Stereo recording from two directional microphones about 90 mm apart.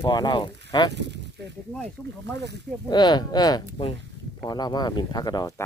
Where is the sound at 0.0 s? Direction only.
50° left (ahead or behind).